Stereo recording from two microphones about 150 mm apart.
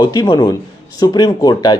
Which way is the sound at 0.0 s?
30° left (ahead or behind).